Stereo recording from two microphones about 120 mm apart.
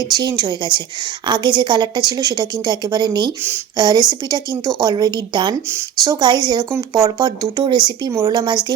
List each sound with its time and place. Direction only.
0.2 s a woman's voice: 35° right (ahead or behind)